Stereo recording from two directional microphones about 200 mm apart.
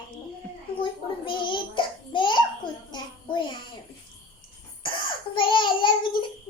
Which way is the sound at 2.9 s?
25° left (ahead or behind).